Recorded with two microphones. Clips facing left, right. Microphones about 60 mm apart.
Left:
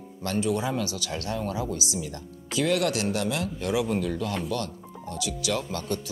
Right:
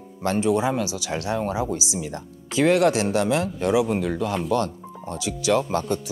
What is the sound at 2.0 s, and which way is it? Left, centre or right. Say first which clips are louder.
Speech: right 4 dB; right.